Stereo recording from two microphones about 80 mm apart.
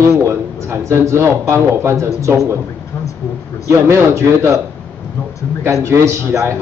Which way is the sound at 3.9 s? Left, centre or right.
Right.